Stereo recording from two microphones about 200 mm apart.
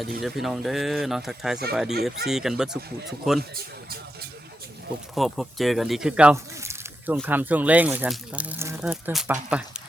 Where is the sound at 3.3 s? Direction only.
50° right (ahead or behind).